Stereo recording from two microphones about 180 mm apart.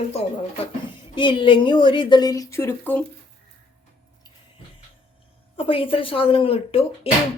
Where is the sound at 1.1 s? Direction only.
25° left (ahead or behind); by 3.0 s 10° left (ahead or behind).